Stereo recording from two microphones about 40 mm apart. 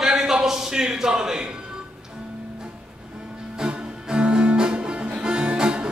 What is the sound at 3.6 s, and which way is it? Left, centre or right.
Music, right.